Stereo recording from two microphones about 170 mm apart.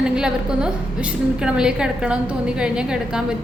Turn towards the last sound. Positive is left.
turn(degrees=-5)  # may be behind; listen again after turning